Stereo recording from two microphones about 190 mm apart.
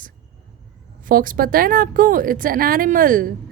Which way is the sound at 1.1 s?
45° right (ahead or behind).